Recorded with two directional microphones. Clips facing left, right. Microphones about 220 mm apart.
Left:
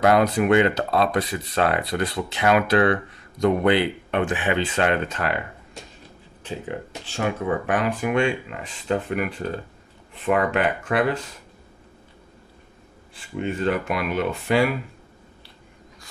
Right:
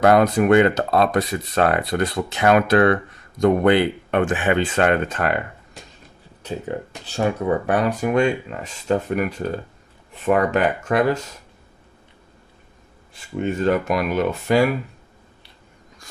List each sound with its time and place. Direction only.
0.0 s speech: 45° right (ahead or behind)
7.1 s speech: 40° right (ahead or behind)
13.1 s speech: 45° right (ahead or behind)